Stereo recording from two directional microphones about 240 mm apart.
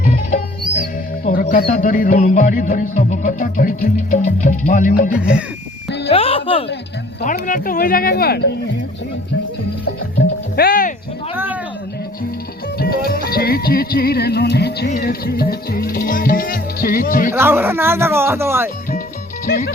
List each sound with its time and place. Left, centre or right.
0.0 s music: left
6.1 s speech: left
7.2 s music: left
10.2 s music: left
12.8 s music: left
13.3 s speech: left
17.3 s speech: centre
19.5 s music: left